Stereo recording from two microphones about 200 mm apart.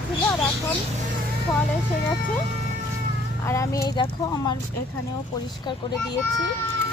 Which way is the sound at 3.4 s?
15° left (ahead or behind).